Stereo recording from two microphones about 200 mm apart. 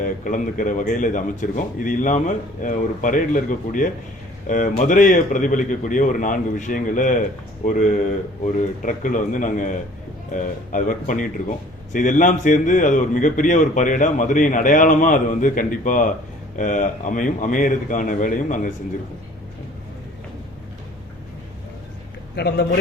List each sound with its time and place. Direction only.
0.0 s a man's voice: 40° left (ahead or behind)
22.4 s speech: 55° left (ahead or behind)